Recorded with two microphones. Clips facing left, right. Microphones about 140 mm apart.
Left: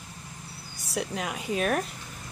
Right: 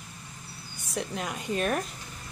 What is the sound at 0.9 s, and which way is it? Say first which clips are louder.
Speech: left 2 dB; 5° left (ahead or behind).